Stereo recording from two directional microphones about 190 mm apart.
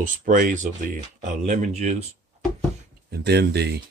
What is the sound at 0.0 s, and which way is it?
Speech, 45° right (ahead or behind).